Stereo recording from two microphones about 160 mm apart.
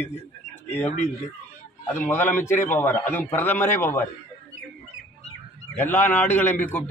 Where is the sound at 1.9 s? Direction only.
15° left (ahead or behind).